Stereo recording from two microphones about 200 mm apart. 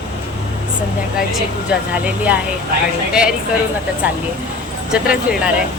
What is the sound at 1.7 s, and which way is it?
Speech, 5° right (ahead or behind).